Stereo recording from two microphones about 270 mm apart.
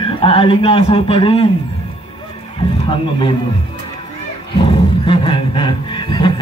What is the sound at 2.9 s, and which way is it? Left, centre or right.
Speech, centre.